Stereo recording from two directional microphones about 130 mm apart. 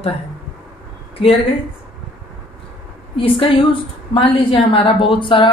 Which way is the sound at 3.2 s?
45° left (ahead or behind).